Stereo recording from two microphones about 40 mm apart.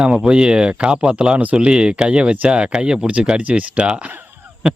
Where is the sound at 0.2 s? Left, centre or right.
Right.